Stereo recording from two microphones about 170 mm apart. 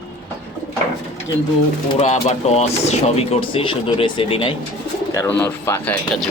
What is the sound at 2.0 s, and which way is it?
Speech, 40° left (ahead or behind).